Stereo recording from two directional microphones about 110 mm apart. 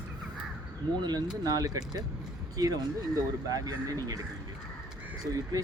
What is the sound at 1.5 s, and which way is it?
Speech, 35° right (ahead or behind).